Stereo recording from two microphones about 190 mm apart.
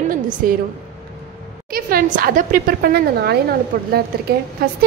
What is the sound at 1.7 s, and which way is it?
A woman's voice, 50° right (ahead or behind).